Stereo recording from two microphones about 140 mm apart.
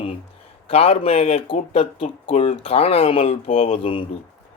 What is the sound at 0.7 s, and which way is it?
A man's voice, 45° left (ahead or behind).